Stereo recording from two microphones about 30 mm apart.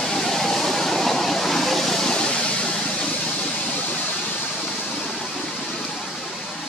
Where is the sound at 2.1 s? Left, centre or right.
Left.